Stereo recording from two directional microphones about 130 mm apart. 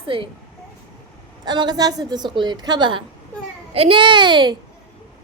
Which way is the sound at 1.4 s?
35° right (ahead or behind).